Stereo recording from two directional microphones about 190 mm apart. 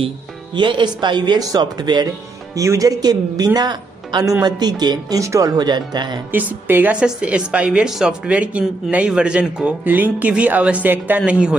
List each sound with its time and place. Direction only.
0.6 s speech: 25° right (ahead or behind)
6.3 s a woman's voice: 10° right (ahead or behind)